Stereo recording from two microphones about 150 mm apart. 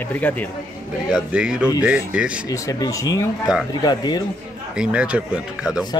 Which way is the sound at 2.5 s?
25° left (ahead or behind).